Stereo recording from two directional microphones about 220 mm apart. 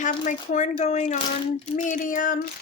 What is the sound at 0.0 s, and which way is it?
Speech, 35° left (ahead or behind).